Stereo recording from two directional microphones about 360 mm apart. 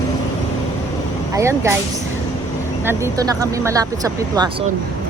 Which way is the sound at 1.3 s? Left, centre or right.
Centre.